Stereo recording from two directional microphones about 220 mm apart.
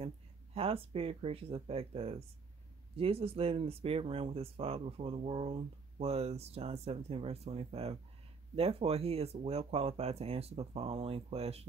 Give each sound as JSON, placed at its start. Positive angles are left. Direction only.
{"t": 0.6, "sound": "speech", "side_deg": -25}